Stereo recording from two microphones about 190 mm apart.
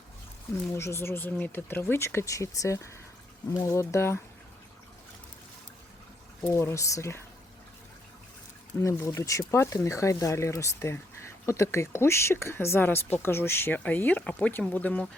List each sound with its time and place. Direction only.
0.8 s speech: 15° left (ahead or behind)
6.4 s speech: 15° left (ahead or behind)
8.8 s speech: 15° left (ahead or behind)